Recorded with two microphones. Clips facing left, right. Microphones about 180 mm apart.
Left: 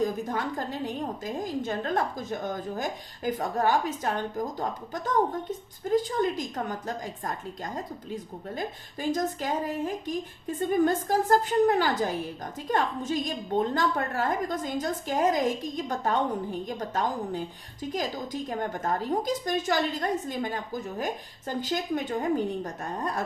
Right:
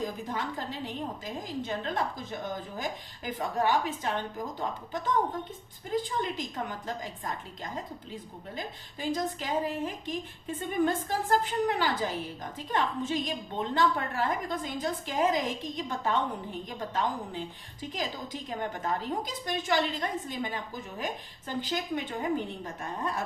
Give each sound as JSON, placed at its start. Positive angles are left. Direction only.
{"t": 0.0, "sound": "a woman's voice", "side_deg": 45}
{"t": 3.3, "sound": "a woman's voice", "side_deg": 45}